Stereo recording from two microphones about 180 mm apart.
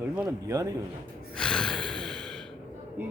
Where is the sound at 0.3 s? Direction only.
20° right (ahead or behind).